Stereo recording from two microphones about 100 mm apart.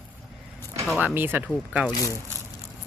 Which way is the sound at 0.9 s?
20° right (ahead or behind).